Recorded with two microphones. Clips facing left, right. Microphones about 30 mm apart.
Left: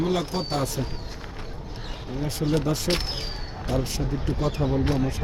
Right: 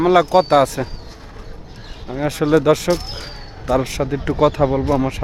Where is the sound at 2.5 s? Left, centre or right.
Right.